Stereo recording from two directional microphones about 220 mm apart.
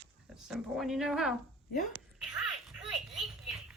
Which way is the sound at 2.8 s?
Centre (ahead or behind).